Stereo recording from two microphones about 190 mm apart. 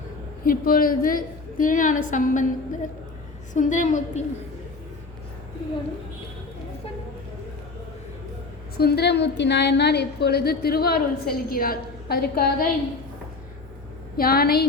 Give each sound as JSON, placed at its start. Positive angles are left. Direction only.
{"t": 0.4, "sound": "a woman's voice", "side_deg": 50}
{"t": 8.8, "sound": "a woman's voice", "side_deg": 60}
{"t": 14.2, "sound": "a woman's voice", "side_deg": 50}